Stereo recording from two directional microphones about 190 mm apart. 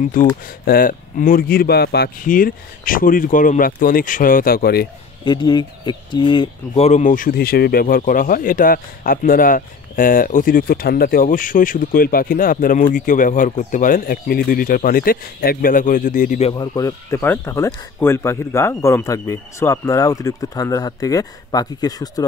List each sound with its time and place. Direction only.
0.0 s speech: 45° left (ahead or behind)
5.2 s speech: 25° left (ahead or behind)
6.9 s speech: 40° left (ahead or behind)
16.5 s speech: 20° left (ahead or behind)